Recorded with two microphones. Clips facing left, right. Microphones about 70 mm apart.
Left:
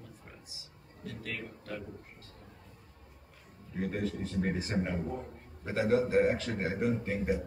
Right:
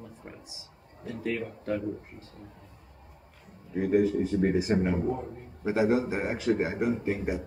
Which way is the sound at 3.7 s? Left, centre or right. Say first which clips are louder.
Right 10 dB; centre.